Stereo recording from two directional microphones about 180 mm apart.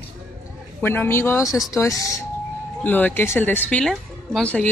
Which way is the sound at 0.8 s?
10° left (ahead or behind).